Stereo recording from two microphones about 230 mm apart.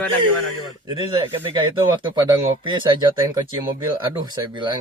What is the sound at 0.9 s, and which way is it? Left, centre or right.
Speech, right.